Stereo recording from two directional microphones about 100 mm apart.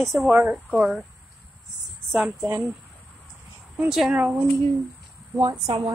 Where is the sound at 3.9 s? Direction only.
5° right (ahead or behind).